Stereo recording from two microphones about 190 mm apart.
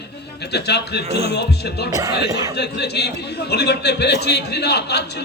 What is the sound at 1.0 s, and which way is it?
Speech, 30° right (ahead or behind).